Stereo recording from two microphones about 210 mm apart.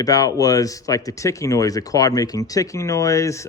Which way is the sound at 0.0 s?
15° left (ahead or behind).